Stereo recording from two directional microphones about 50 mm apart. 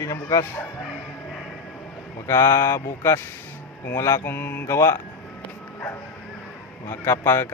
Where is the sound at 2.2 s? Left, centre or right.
Left.